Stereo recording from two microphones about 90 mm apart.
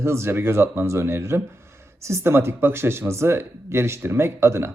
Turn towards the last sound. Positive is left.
turn(degrees=-30)  # may be behind; listen again after turning